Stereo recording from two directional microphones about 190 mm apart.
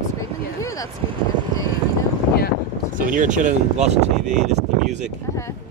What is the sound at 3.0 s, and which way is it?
Speech, 45° right (ahead or behind).